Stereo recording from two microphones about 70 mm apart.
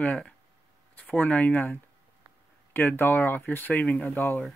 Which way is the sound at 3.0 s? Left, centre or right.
Left.